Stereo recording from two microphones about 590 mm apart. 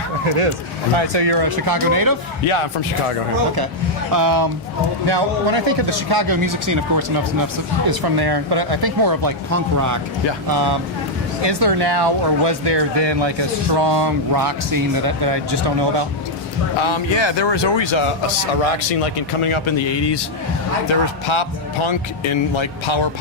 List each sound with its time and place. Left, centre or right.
0.9 s speech: right
4.1 s speech: right
5.0 s speech: right
16.8 s speech: left
18.6 s speech: left